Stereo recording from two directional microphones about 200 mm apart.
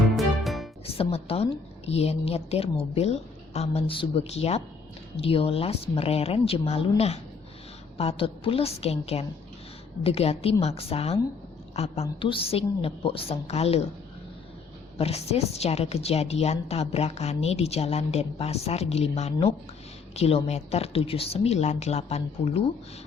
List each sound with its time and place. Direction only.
0.1 s music: centre (ahead or behind)
0.9 s a woman's voice: 30° left (ahead or behind)
14.9 s a woman's voice: 30° left (ahead or behind)